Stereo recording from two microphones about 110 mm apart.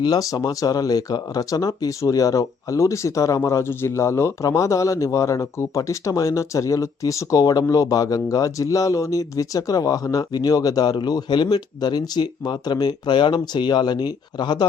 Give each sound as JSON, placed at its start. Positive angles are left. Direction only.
{"t": 0.0, "sound": "speech", "side_deg": 35}